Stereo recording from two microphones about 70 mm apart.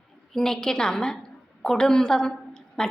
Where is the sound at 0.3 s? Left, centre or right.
Centre.